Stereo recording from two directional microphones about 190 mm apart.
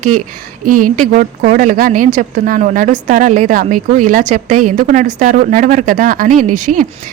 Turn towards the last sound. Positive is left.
turn(degrees=-40)  # may be behind; listen again after turning